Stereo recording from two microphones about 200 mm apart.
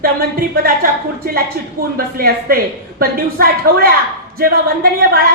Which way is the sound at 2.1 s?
50° right (ahead or behind).